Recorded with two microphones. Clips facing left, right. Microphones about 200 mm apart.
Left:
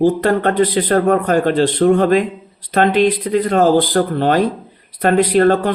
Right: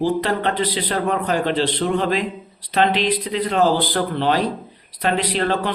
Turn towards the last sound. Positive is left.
turn(degrees=50)  # may be behind; listen again after turning